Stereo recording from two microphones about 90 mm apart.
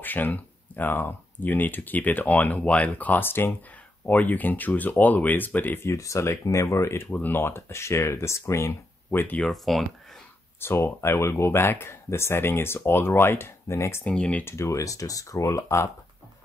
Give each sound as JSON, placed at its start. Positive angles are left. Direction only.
{"t": 0.0, "sound": "speech", "side_deg": 20}
{"t": 5.9, "sound": "speech", "side_deg": 35}
{"t": 9.5, "sound": "speech", "side_deg": 0}
{"t": 10.6, "sound": "speech", "side_deg": 30}
{"t": 14.0, "sound": "speech", "side_deg": 15}
{"t": 14.4, "sound": "speech", "side_deg": 30}